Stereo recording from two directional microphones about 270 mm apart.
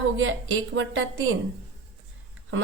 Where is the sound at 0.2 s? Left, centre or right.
Right.